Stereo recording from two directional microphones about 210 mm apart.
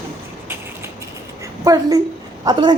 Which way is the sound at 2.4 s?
20° right (ahead or behind).